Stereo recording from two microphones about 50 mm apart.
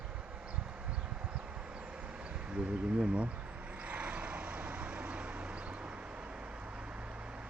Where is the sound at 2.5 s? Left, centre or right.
Right.